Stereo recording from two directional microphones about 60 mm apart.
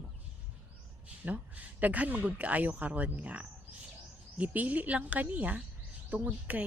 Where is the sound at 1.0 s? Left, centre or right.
Right.